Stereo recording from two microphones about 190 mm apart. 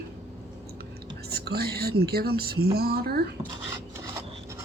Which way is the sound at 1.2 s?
55° right (ahead or behind).